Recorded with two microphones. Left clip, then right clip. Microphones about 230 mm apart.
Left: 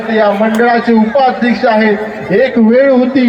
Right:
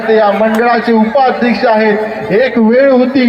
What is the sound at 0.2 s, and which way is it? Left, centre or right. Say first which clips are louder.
A man's voice: right 1 dB; centre.